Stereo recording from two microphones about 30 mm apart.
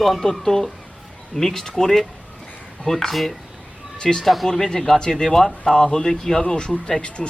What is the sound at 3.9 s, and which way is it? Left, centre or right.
Speech, left.